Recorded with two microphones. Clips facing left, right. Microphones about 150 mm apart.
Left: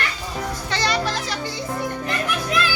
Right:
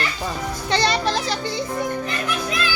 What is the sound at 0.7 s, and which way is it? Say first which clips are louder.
Speech: right 4 dB; 25° right (ahead or behind).